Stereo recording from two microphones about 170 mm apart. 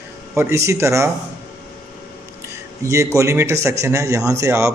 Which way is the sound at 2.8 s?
20° right (ahead or behind).